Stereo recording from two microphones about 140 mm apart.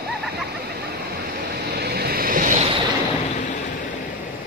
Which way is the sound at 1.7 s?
90° right.